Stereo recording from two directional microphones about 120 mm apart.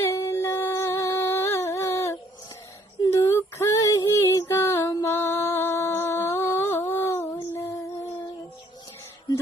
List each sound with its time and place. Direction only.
0.0 s a sound: 25° left (ahead or behind)
3.0 s female singing: 25° left (ahead or behind)
4.9 s music: 25° left (ahead or behind)